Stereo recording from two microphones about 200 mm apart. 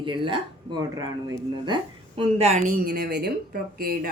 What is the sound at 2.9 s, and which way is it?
Speech, 50° right (ahead or behind).